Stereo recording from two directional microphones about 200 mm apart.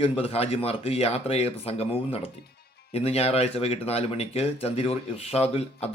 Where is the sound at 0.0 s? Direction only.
30° left (ahead or behind).